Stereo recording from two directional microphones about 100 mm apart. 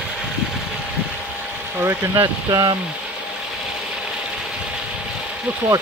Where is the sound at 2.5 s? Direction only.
45° right (ahead or behind).